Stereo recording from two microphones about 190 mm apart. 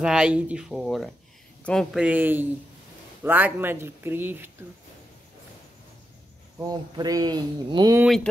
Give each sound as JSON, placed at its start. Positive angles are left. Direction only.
{"t": 0.0, "sound": "speech", "side_deg": -5}
{"t": 6.7, "sound": "speech", "side_deg": -20}